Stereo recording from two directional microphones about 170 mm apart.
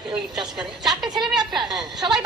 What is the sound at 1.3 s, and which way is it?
Speech, 25° right (ahead or behind).